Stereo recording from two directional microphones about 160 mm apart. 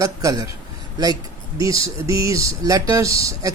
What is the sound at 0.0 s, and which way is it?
Speech, 20° right (ahead or behind).